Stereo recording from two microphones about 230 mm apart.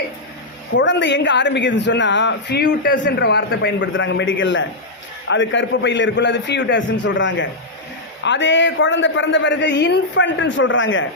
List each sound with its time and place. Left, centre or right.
0.7 s speech: left